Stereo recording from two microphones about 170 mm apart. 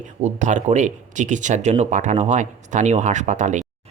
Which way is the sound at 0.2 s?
45° right (ahead or behind).